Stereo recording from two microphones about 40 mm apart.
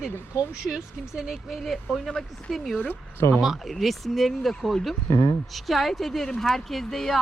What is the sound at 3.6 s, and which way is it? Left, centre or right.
Speech, centre.